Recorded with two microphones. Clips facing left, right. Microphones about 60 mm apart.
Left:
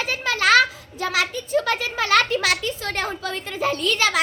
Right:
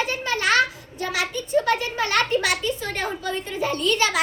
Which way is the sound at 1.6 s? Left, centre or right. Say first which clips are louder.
Right 1 dB; left.